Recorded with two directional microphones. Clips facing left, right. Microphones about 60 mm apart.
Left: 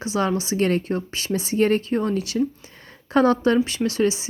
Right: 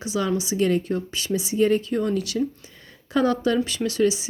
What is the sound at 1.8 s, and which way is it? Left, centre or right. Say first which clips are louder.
Speech: left 1 dB; left.